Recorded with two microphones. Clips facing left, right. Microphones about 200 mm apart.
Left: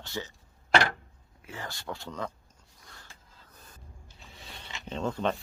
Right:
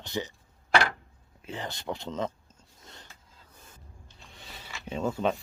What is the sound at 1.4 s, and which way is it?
Speech, 20° right (ahead or behind).